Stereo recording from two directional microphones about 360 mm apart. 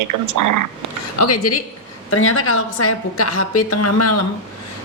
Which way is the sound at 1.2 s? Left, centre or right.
Left.